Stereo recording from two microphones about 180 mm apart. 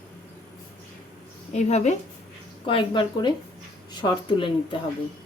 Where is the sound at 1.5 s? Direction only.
40° left (ahead or behind).